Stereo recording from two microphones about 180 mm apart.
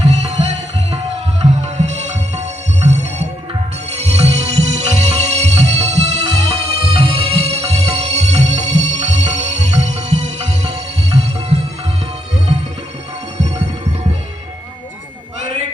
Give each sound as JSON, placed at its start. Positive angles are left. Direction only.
{"t": 0.0, "sound": "music", "side_deg": -35}